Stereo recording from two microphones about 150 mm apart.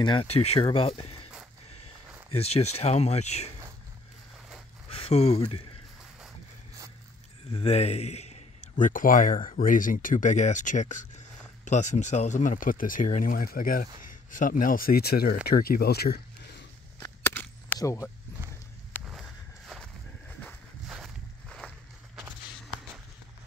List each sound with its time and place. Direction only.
0.0 s speech: 35° left (ahead or behind)
2.3 s speech: 45° left (ahead or behind)
4.8 s speech: 40° left (ahead or behind)
7.5 s a man's voice: 45° left (ahead or behind); by 16.2 s 90° left
17.0 s chop: 15° left (ahead or behind)
17.7 s speech: 20° left (ahead or behind)
19.8 s a sound: 10° left (ahead or behind)
20.9 s walk: centre (ahead or behind)